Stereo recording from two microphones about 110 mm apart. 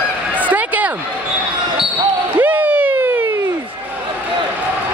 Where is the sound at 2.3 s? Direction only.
15° right (ahead or behind).